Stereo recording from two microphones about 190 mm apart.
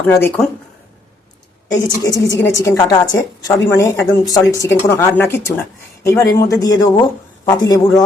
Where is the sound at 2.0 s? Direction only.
20° left (ahead or behind).